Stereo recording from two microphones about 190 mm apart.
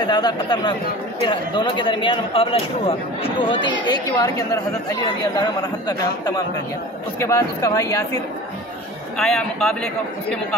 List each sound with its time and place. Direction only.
0.0 s speech: 20° left (ahead or behind)
9.2 s a man's voice: 5° left (ahead or behind)